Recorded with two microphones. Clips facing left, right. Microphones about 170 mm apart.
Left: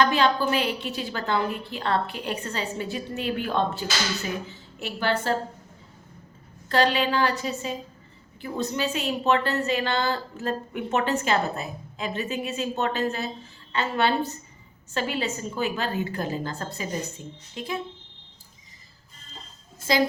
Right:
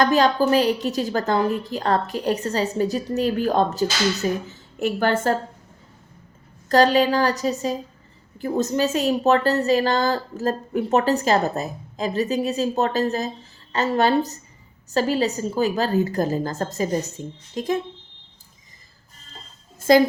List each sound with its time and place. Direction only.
0.0 s a woman's voice: 40° right (ahead or behind)
6.7 s a woman's voice: 40° right (ahead or behind)
19.9 s a woman's voice: 50° right (ahead or behind)